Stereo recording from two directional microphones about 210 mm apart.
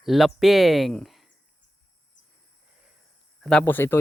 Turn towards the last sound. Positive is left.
turn(degrees=10)  # may be behind; listen again after turning